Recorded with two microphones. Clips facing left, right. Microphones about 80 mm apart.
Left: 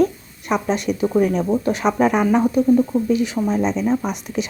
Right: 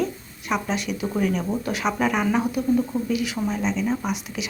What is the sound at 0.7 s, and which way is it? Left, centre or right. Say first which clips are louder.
Speech: left 7 dB; left.